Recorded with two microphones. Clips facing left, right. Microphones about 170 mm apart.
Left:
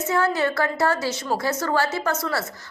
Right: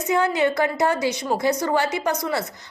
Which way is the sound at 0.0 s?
15° right (ahead or behind).